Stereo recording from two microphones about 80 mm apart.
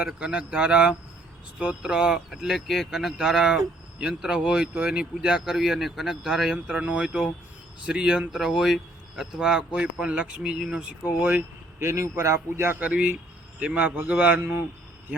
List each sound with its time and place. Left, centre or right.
0.0 s speech: centre
11.2 s a man's voice: right
11.8 s a man's voice: right
12.8 s a man's voice: centre